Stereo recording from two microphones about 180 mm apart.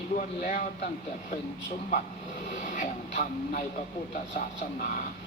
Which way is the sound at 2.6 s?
45° left (ahead or behind).